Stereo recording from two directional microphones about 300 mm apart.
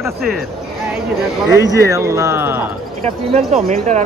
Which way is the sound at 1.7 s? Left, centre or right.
Centre.